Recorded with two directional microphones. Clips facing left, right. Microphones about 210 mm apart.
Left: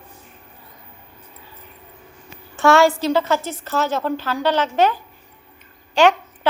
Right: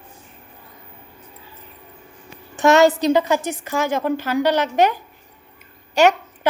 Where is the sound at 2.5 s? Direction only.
20° right (ahead or behind).